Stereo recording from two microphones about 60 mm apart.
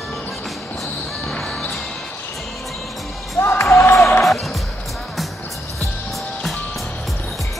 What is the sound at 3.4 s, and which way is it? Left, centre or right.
Music, left.